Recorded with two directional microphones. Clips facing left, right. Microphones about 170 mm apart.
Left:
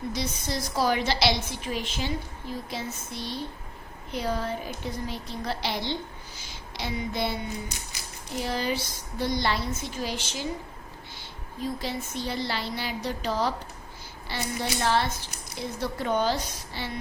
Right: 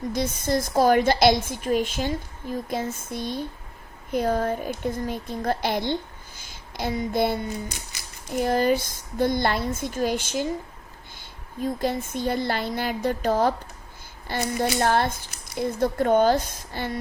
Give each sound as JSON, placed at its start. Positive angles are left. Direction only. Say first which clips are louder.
{"t": 0.1, "sound": "a woman's voice", "louder": "right 11 dB", "side_deg": -50}
{"t": 11.6, "sound": "a woman's voice", "louder": "right 6 dB", "side_deg": -50}